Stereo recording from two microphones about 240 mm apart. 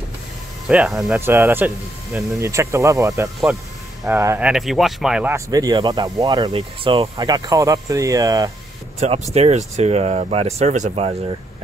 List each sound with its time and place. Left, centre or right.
0.7 s speech: centre
9.0 s speech: right